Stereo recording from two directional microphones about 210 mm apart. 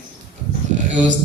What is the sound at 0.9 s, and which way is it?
Speech, 35° right (ahead or behind).